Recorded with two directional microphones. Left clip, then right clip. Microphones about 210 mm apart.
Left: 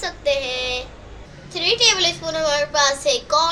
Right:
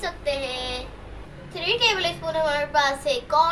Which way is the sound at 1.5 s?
40° left (ahead or behind).